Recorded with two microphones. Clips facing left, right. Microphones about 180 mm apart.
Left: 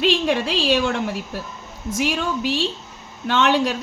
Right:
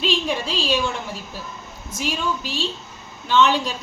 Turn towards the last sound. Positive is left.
turn(degrees=70)  # may be behind; listen again after turning